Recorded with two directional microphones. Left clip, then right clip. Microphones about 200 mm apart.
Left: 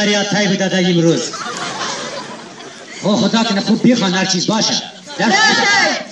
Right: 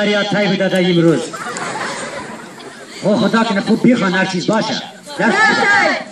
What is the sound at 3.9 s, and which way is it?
Speech, 45° left (ahead or behind).